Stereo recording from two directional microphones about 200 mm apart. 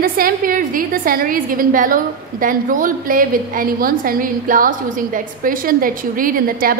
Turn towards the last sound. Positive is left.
turn(degrees=-45)  # may be behind; listen again after turning